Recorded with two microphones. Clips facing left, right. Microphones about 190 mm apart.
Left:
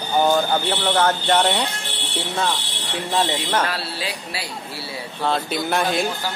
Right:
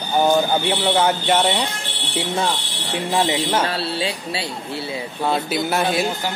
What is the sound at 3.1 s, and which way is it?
Speech, 10° right (ahead or behind).